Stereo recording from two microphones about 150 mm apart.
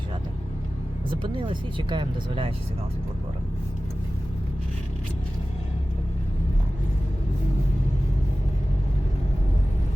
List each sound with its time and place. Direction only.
1.9 s speech: 35° right (ahead or behind)